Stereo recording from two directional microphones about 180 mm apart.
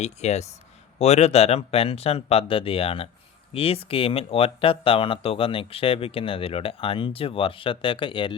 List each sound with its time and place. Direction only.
0.0 s speech: 40° left (ahead or behind)